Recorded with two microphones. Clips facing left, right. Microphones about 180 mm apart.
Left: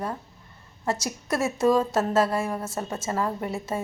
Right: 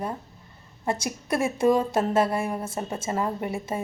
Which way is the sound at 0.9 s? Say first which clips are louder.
Right 1 dB; 55° right (ahead or behind).